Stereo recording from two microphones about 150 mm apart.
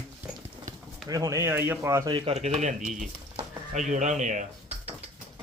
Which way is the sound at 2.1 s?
35° right (ahead or behind).